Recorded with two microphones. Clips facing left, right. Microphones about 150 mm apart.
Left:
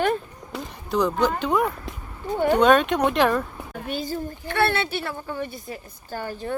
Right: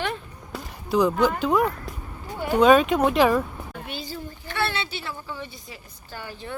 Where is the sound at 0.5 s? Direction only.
5° right (ahead or behind).